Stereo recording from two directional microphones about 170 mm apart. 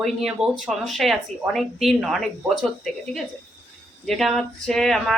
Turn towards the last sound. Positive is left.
turn(degrees=0)  # may be behind; listen again after turning